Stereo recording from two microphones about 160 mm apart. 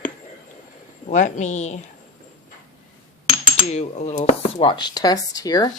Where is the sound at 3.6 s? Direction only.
45° left (ahead or behind).